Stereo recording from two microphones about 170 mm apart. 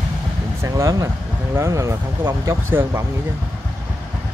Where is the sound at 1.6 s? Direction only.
15° right (ahead or behind).